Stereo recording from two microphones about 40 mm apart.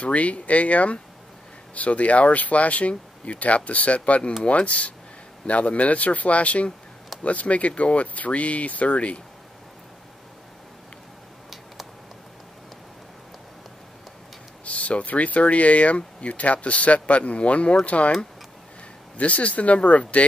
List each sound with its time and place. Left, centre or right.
0.0 s speech: left
11.5 s a sound: centre
14.6 s speech: left
19.1 s speech: left